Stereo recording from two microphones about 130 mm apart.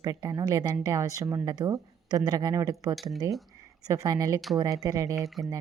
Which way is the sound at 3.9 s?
25° right (ahead or behind).